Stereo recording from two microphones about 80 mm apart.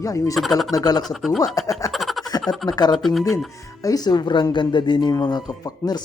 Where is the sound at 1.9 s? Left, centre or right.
Centre.